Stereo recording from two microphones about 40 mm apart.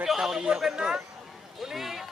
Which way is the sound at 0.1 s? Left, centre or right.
Centre.